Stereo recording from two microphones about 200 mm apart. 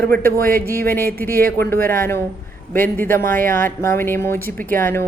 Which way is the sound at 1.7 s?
10° left (ahead or behind).